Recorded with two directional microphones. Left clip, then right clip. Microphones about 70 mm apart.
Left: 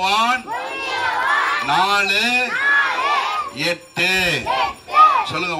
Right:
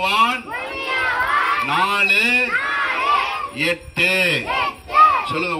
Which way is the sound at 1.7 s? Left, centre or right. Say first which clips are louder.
Left 1 dB; left.